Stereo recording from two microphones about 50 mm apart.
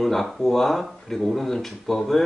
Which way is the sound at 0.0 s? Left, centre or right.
Centre.